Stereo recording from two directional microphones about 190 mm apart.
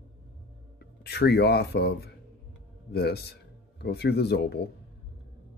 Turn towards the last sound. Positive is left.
turn(degrees=60)  # may be behind; listen again after turning